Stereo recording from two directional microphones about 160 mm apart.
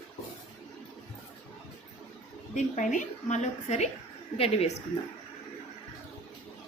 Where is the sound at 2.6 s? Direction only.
55° left (ahead or behind).